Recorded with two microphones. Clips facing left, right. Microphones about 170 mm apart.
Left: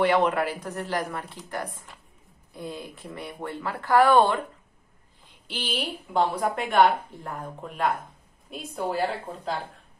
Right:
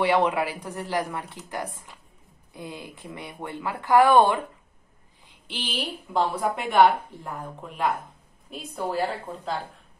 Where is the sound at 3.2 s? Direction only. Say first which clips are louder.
Left 1 dB; 15° right (ahead or behind).